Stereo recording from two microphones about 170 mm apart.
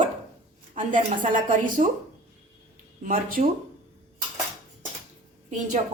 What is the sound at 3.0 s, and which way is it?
Speech, 50° right (ahead or behind).